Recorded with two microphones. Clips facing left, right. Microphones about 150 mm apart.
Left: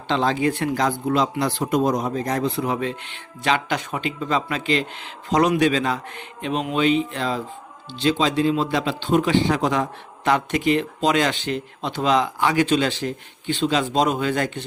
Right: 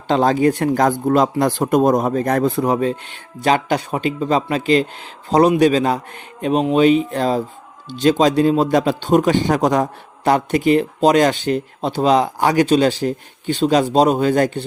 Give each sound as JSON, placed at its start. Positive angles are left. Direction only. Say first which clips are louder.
{"t": 0.1, "sound": "speech", "louder": "right 6 dB", "side_deg": -45}